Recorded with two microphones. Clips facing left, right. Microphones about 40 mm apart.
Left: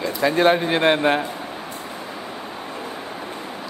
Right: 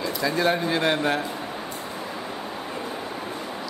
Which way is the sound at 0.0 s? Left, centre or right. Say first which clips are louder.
Left 5 dB; left.